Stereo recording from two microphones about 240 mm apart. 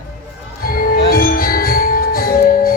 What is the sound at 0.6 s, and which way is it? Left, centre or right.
Music, left.